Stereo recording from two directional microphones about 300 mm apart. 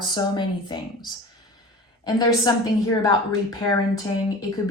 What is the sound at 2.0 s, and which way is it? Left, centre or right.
Speech, centre.